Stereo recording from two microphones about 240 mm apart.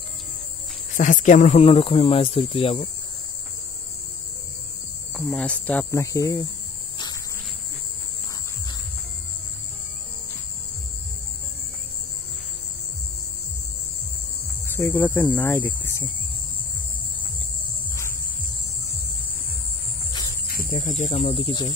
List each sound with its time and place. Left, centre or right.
0.9 s speech: left
5.1 s speech: centre
14.8 s speech: centre
20.1 s music: centre
20.4 s snake: left